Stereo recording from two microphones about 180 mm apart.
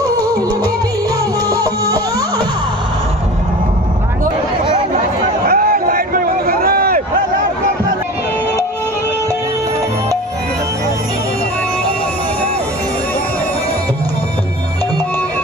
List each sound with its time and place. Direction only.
0.0 s music: 20° right (ahead or behind)
1.5 s music: 20° right (ahead or behind)
5.5 s a sound: 55° right (ahead or behind)